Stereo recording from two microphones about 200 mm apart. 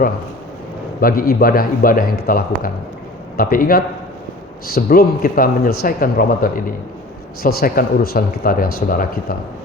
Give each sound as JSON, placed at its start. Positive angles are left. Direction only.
{"t": 1.0, "sound": "speech", "side_deg": 45}